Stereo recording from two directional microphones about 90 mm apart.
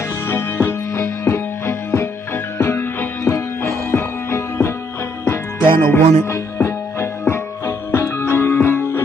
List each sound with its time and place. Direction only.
0.3 s music: 30° left (ahead or behind)